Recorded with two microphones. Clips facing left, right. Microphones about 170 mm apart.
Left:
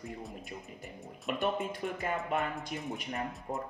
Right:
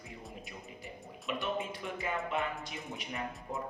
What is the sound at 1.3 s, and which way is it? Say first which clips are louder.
Speech: left 3 dB; 50° left (ahead or behind).